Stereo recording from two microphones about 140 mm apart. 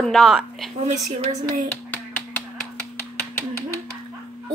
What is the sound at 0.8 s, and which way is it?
Speech, 55° right (ahead or behind).